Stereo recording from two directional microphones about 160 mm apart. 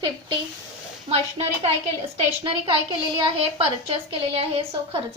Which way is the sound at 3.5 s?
40° right (ahead or behind).